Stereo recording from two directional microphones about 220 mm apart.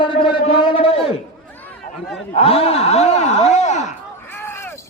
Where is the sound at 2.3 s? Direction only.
25° left (ahead or behind).